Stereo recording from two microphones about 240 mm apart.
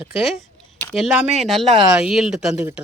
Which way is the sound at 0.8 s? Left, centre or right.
Centre.